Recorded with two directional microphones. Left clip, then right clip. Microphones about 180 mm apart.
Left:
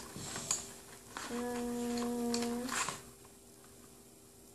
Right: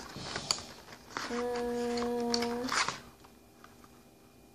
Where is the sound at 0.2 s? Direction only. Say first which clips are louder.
Right 5 dB; 45° right (ahead or behind).